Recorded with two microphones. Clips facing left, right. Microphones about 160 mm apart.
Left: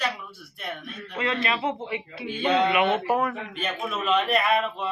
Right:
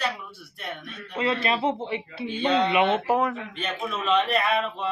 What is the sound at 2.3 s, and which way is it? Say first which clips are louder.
A man's voice: even; 10° left (ahead or behind).